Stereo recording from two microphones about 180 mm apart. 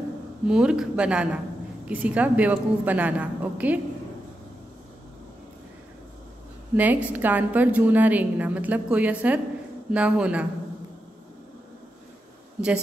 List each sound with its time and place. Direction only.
0.5 s a woman's voice: 5° right (ahead or behind)
6.7 s a woman's voice: 10° right (ahead or behind)